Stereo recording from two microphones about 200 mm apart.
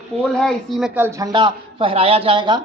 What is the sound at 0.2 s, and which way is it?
A man's voice, centre (ahead or behind).